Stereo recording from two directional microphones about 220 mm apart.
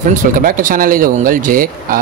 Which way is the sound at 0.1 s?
40° right (ahead or behind).